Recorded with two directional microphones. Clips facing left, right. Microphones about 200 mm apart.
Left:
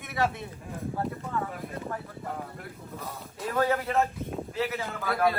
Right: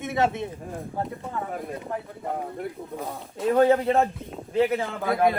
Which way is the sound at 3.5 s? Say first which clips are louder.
Right 7 dB; 25° right (ahead or behind).